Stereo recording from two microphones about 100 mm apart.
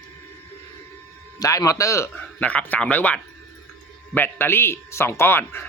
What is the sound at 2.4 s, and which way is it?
Speech, 15° left (ahead or behind).